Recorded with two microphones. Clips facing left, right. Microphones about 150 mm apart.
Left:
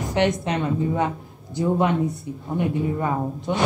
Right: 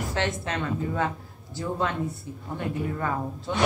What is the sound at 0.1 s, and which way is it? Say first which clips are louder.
A woman's voice: left 9 dB; 20° left (ahead or behind).